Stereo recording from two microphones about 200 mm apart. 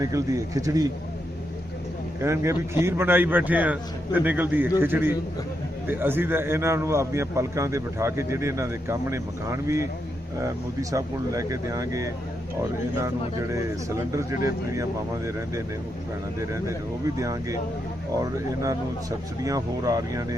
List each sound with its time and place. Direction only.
0.0 s a man's voice: 15° right (ahead or behind)
2.2 s a man's voice: 15° right (ahead or behind)
13.5 s a man's voice: 15° right (ahead or behind)